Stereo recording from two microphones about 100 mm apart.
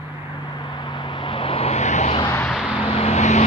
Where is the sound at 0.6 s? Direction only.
50° left (ahead or behind); by 2.2 s 90° left.